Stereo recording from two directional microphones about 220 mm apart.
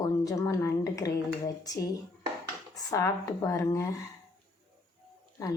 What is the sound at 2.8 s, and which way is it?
A woman's voice, 15° left (ahead or behind).